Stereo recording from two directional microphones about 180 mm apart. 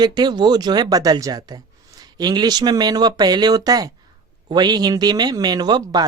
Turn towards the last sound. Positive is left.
turn(degrees=-25)  # may be behind; listen again after turning